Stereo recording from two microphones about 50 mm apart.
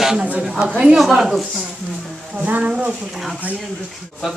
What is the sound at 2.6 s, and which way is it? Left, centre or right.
Speech, right.